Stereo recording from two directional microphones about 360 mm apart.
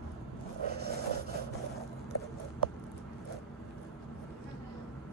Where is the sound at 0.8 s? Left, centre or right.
Right.